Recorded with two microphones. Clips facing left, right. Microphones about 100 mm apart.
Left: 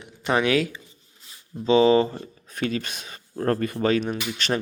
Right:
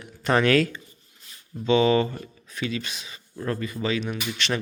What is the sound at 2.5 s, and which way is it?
A man's voice, 45° left (ahead or behind).